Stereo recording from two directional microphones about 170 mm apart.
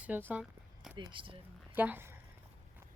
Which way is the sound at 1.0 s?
30° right (ahead or behind).